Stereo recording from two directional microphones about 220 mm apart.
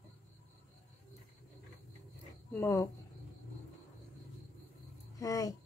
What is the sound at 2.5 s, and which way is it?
Speech, 15° left (ahead or behind).